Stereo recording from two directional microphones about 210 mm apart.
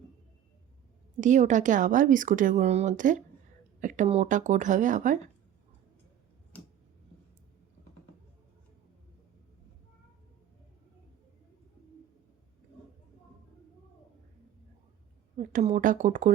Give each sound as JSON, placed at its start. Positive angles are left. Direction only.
{"t": 1.2, "sound": "speech", "side_deg": -35}
{"t": 15.4, "sound": "speech", "side_deg": -35}